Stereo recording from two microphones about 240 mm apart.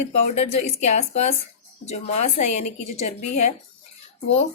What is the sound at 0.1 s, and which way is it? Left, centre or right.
Speech, left.